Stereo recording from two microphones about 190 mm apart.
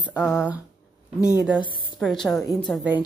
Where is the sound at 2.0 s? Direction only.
Centre (ahead or behind).